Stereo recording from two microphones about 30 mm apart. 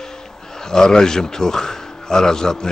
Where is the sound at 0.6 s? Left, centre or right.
Left.